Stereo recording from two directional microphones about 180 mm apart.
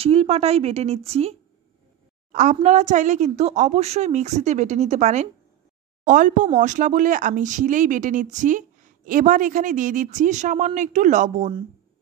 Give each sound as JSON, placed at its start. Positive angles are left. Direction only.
{"t": 0.0, "sound": "a woman's voice", "side_deg": -35}
{"t": 2.3, "sound": "a woman's voice", "side_deg": -45}